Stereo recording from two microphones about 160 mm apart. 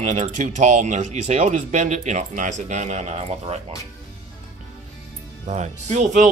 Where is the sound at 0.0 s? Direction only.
50° right (ahead or behind).